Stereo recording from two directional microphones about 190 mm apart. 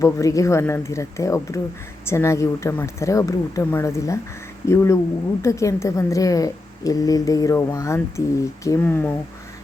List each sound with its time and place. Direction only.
0.0 s a woman's voice: 15° left (ahead or behind)